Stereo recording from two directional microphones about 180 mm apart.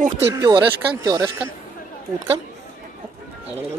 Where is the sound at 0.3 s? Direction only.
20° right (ahead or behind).